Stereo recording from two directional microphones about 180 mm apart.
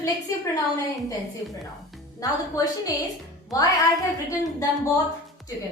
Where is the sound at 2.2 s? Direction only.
20° left (ahead or behind).